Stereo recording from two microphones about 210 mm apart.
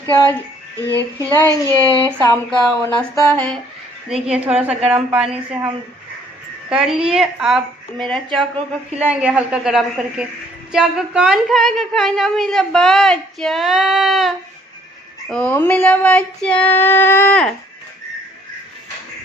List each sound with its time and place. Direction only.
0.0 s female singing: 15° left (ahead or behind)
1.5 s speech: 20° right (ahead or behind)
2.5 s a woman's voice: 5° left (ahead or behind)
3.2 s female singing: 10° left (ahead or behind)
4.1 s a woman's voice: 5° right (ahead or behind)
6.7 s a woman's voice: 5° right (ahead or behind)
15.3 s female singing: 5° left (ahead or behind)